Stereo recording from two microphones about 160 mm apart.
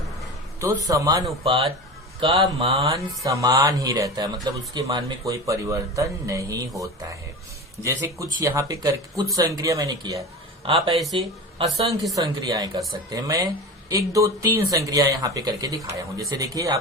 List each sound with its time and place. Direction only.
0.6 s speech: 20° right (ahead or behind)
2.2 s speech: 35° right (ahead or behind)
2.8 s speech: 20° right (ahead or behind)
7.9 s speech: 20° right (ahead or behind)
10.7 s speech: 35° right (ahead or behind)
10.9 s speech: centre (ahead or behind)
11.6 s speech: 30° right (ahead or behind)